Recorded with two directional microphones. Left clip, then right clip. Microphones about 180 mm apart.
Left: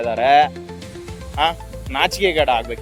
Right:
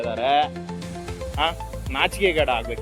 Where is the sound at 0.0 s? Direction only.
45° left (ahead or behind).